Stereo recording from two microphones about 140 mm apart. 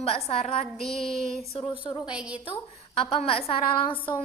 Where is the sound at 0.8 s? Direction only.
Centre (ahead or behind).